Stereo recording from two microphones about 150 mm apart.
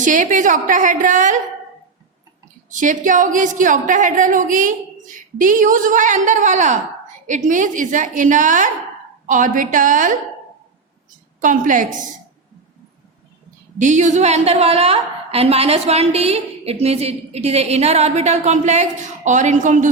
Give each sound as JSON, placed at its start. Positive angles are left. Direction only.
{"t": 0.0, "sound": "a woman's voice", "side_deg": -60}
{"t": 2.6, "sound": "a woman's voice", "side_deg": -60}
{"t": 11.3, "sound": "a woman's voice", "side_deg": -60}
{"t": 13.7, "sound": "a woman's voice", "side_deg": -55}